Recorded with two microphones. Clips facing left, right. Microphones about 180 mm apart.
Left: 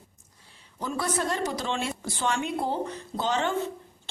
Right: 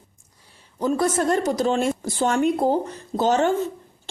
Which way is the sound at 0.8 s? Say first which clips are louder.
Right 8 dB; 45° right (ahead or behind).